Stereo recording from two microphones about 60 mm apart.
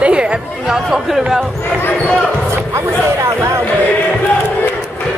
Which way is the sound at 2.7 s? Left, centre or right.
Right.